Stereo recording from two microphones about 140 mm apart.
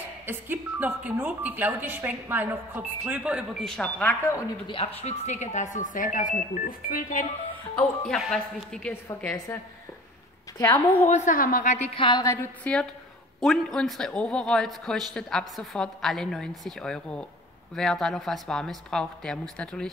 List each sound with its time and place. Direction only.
0.3 s a woman's voice: 15° right (ahead or behind)
3.6 s speech: 5° left (ahead or behind)
4.6 s speech: 45° left (ahead or behind); by 7.2 s 85° left
7.7 s a man's voice: 5° left (ahead or behind)
9.2 s speech: 15° left (ahead or behind)
11.1 s a woman's voice: 55° left (ahead or behind)
11.3 s speech: 80° left; by 11.9 s 60° left (ahead or behind)
11.9 s a woman's voice: 35° left (ahead or behind)
12.4 s a man's voice: 10° left (ahead or behind)